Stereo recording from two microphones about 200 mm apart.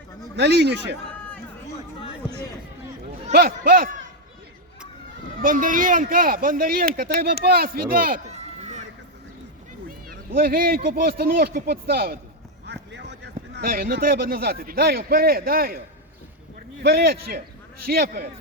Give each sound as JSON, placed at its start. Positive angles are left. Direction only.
{"t": 0.3, "sound": "speech", "side_deg": -60}
{"t": 3.3, "sound": "speech", "side_deg": -45}
{"t": 5.4, "sound": "speech", "side_deg": -40}
{"t": 8.3, "sound": "children playing", "side_deg": -35}
{"t": 10.1, "sound": "speech", "side_deg": -45}
{"t": 12.6, "sound": "speech", "side_deg": -60}
{"t": 16.8, "sound": "speech", "side_deg": -55}